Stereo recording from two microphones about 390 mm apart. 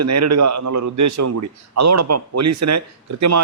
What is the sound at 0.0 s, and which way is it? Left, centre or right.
A man's voice, right.